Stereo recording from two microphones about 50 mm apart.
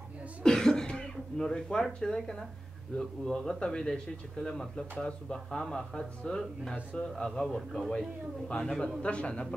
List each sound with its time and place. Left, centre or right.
0.4 s throat clearing: centre
3.0 s speech: centre
8.5 s a man's voice: centre